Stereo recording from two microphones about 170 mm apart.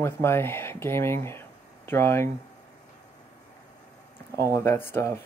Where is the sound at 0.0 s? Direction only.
15° left (ahead or behind).